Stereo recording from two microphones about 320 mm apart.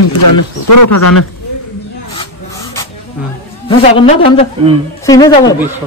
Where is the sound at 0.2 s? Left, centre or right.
Left.